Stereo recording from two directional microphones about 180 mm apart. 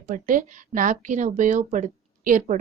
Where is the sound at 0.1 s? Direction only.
45° right (ahead or behind).